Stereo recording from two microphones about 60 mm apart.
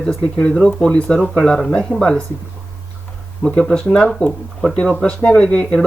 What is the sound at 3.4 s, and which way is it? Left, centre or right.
Speech, centre.